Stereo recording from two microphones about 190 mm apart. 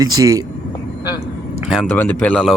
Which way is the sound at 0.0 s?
20° right (ahead or behind).